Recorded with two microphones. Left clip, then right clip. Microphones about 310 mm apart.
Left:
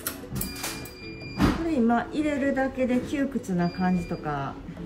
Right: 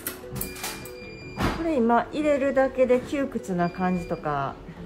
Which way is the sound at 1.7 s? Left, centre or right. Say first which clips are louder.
Right 3 dB; right.